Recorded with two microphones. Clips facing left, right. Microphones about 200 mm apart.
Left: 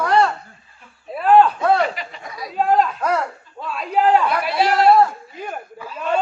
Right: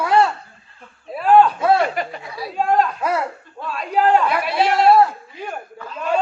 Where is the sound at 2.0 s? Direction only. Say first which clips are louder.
Right 9 dB; 50° right (ahead or behind).